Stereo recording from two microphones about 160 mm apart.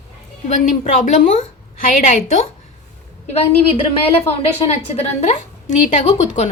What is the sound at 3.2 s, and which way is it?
A woman's voice, 40° left (ahead or behind).